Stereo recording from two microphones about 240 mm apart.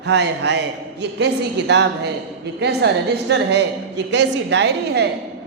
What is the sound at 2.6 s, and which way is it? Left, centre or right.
A woman's voice, right.